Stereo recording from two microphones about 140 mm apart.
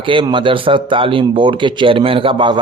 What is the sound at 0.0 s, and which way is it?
A man's voice, 35° right (ahead or behind).